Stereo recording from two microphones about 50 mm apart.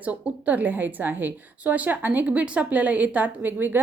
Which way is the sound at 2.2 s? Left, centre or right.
Right.